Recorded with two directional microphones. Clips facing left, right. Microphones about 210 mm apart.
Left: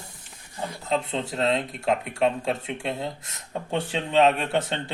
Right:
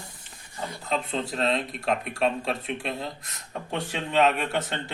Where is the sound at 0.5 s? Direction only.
20° left (ahead or behind).